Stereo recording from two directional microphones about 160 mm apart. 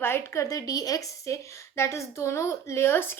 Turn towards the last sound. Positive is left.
turn(degrees=15)  # may be behind; listen again after turning